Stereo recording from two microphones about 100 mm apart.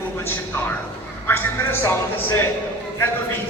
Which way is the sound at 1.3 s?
25° left (ahead or behind).